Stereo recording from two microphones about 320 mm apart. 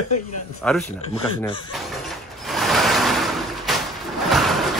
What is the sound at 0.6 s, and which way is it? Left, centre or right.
Speech, centre.